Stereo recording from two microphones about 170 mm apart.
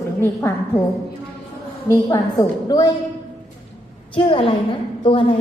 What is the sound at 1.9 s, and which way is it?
A woman's voice, 20° left (ahead or behind).